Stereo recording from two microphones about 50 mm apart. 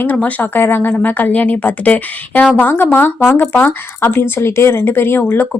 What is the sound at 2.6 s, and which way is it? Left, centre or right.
Speech, left.